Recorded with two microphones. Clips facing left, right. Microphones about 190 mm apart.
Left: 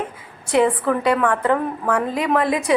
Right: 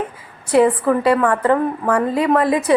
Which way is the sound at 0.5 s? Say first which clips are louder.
Right 3 dB; 5° right (ahead or behind).